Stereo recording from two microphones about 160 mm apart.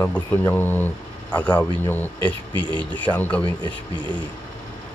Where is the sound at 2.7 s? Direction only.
30° right (ahead or behind).